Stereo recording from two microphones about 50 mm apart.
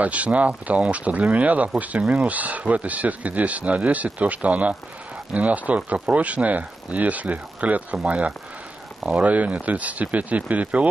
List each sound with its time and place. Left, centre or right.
0.0 s speech: right
9.1 s speech: right